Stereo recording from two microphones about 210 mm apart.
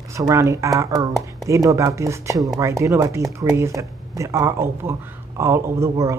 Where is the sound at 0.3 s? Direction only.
15° right (ahead or behind).